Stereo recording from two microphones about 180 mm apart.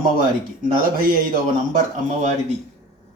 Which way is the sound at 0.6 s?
50° right (ahead or behind).